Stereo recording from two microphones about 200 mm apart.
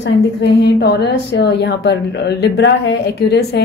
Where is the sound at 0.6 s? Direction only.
55° left (ahead or behind).